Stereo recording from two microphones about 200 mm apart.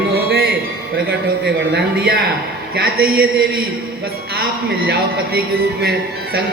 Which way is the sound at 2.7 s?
50° right (ahead or behind).